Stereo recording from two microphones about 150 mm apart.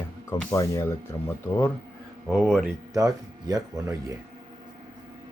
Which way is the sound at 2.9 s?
25° right (ahead or behind).